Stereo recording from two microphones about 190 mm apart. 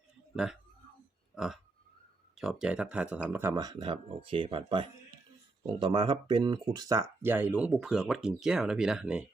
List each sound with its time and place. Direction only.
2.3 s speech: centre (ahead or behind)